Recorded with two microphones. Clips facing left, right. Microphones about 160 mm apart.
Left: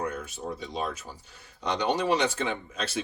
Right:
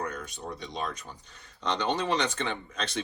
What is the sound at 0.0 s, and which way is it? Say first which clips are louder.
Speech: left 3 dB; 5° left (ahead or behind).